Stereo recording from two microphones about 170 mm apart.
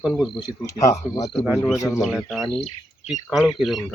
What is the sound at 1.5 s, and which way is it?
Speech, centre (ahead or behind).